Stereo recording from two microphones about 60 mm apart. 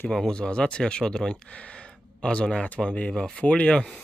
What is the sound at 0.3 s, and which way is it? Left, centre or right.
Speech, centre.